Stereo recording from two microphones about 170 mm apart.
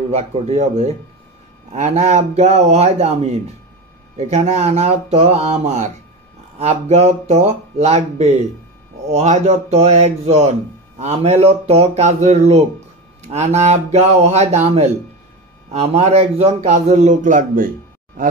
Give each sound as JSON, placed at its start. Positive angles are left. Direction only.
{"t": 0.1, "sound": "a man's voice", "side_deg": -40}